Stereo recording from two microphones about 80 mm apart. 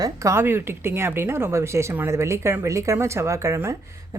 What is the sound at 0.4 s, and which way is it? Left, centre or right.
A woman's voice, right.